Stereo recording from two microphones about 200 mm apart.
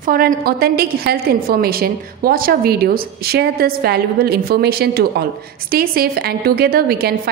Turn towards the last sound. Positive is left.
turn(degrees=-50)  # may be behind; listen again after turning